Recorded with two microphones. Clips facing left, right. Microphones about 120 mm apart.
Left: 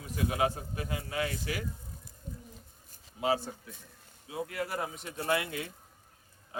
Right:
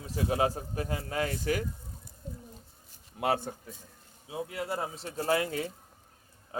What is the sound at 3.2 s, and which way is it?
Speech, 55° right (ahead or behind).